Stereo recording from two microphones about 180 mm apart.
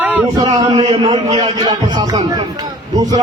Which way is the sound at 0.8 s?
35° right (ahead or behind).